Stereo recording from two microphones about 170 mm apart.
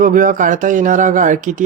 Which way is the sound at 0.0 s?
50° right (ahead or behind).